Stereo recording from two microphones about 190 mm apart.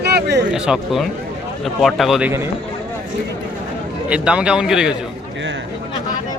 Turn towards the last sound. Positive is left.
turn(degrees=-5)  # may be behind; listen again after turning